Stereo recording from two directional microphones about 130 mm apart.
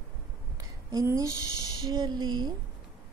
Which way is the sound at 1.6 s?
35° right (ahead or behind).